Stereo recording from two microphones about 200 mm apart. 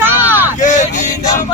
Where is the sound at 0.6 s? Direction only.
35° left (ahead or behind).